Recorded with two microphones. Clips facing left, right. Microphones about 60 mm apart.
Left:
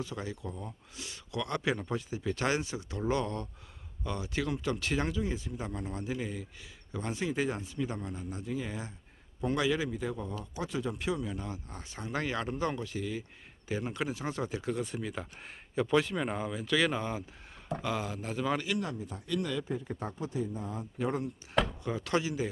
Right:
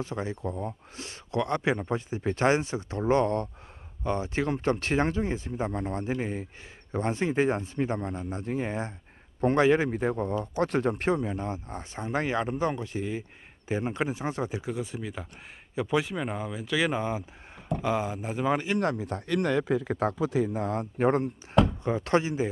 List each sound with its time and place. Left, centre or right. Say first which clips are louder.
0.0 s a man's voice: right 6 dB; right
14.7 s speech: right 1 dB; centre; by 18.8 s right
18.8 s speech: right 8 dB; right
21.0 s a man's voice: right 8 dB; right
21.8 s speech: right 6 dB; right